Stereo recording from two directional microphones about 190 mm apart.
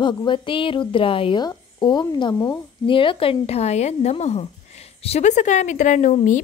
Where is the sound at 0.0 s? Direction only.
25° left (ahead or behind).